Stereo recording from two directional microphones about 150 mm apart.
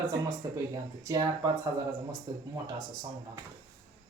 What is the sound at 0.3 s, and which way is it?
Speech, 20° right (ahead or behind).